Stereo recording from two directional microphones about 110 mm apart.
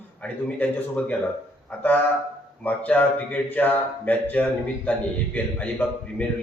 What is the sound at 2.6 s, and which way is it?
Speech, 15° left (ahead or behind).